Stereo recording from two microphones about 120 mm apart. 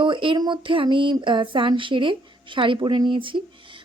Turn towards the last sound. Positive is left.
turn(degrees=-45)  # may be behind; listen again after turning